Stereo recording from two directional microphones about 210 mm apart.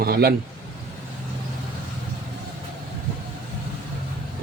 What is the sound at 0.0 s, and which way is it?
Speech, 45° right (ahead or behind).